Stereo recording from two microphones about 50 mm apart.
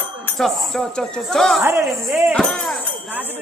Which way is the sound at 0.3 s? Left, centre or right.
Centre.